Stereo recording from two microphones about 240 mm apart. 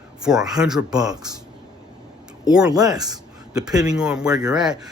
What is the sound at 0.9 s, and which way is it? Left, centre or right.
Speech, centre.